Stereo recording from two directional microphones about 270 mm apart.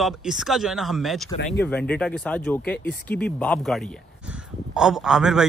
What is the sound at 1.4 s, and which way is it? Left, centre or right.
Speech, left.